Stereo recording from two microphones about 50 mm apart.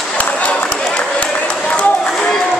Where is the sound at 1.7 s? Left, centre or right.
Centre.